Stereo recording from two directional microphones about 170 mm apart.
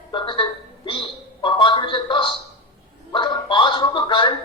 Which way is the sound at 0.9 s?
30° left (ahead or behind).